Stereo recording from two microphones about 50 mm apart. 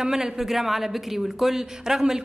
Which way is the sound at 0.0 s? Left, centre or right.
Centre.